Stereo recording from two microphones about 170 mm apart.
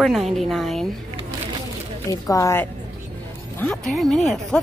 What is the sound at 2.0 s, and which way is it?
Speech, 20° left (ahead or behind).